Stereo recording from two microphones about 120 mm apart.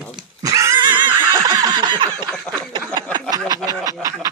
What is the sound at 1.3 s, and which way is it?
Snicker, 30° right (ahead or behind).